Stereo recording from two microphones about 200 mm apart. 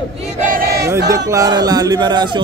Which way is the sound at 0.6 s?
50° right (ahead or behind).